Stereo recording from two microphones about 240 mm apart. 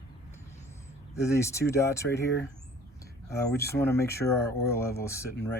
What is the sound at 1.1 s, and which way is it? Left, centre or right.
Speech, centre.